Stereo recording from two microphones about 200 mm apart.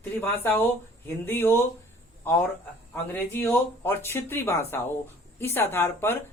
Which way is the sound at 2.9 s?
10° left (ahead or behind).